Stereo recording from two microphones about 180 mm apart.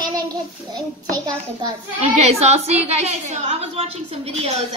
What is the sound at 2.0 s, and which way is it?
A woman's voice, 35° right (ahead or behind).